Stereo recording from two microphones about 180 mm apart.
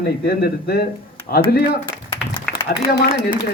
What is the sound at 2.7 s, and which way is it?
Speech, 60° left (ahead or behind).